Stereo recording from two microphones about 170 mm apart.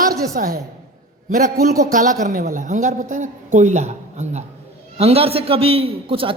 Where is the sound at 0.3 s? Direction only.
60° right (ahead or behind).